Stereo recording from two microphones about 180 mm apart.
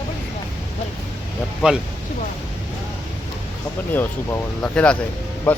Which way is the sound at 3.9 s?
10° left (ahead or behind).